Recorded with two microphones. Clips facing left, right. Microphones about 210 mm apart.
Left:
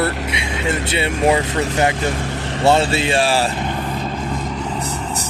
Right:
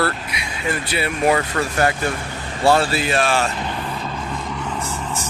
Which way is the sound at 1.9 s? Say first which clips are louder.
Left 3 dB; 85° left.